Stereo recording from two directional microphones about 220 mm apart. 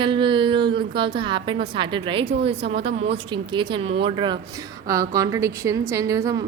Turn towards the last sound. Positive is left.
turn(degrees=-15)  # may be behind; listen again after turning